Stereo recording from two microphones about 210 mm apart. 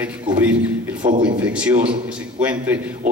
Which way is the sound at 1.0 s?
25° right (ahead or behind).